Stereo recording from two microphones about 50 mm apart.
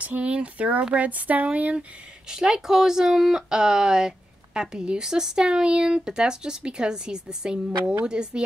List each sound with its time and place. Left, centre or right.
0.0 s speech: right
2.2 s speech: centre